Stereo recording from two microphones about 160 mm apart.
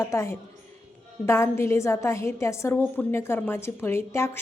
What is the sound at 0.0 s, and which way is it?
A woman's voice, 20° left (ahead or behind).